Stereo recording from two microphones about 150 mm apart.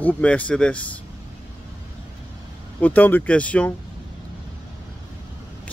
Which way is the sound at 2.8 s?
10° left (ahead or behind).